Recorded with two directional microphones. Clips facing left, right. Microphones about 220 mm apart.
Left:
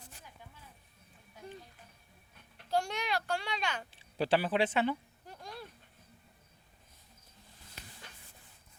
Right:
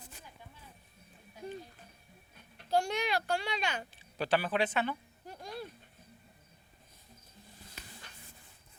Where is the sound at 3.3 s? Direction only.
10° right (ahead or behind).